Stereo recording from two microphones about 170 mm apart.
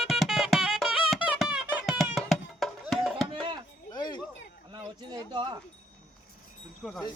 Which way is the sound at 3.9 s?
25° left (ahead or behind).